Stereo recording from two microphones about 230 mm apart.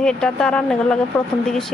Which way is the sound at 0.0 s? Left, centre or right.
Centre.